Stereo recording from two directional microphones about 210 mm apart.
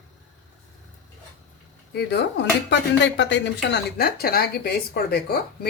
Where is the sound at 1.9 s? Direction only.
55° left (ahead or behind).